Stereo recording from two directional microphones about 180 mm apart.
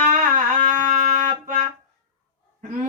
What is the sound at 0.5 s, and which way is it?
Music, 45° right (ahead or behind).